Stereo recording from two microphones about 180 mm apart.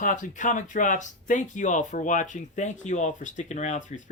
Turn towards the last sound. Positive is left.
turn(degrees=40)  # may be behind; listen again after turning